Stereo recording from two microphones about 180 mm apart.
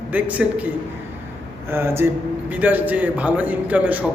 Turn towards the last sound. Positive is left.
turn(degrees=-10)  # may be behind; listen again after turning